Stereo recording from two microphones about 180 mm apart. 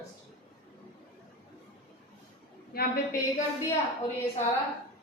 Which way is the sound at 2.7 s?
50° left (ahead or behind).